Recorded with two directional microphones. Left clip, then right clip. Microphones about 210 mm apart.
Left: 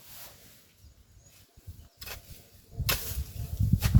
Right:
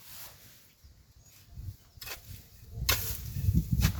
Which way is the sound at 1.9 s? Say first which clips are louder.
Even; 15° right (ahead or behind).